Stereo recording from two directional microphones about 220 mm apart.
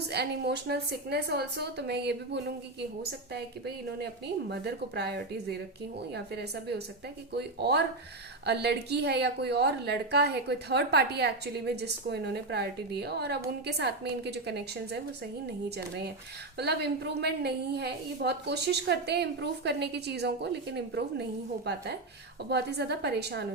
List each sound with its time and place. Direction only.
0.1 s a woman's voice: 50° right (ahead or behind)
3.9 s a woman's voice: 50° right (ahead or behind)
16.6 s a woman's voice: 50° right (ahead or behind)